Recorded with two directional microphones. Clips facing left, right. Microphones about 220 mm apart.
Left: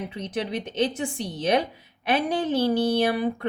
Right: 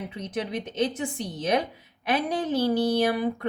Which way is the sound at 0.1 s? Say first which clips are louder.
Left 2 dB; 30° left (ahead or behind).